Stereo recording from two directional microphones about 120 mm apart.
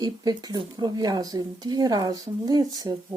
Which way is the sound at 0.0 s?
35° right (ahead or behind).